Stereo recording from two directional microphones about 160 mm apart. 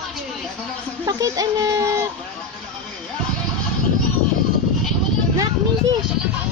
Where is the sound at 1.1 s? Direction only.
20° right (ahead or behind).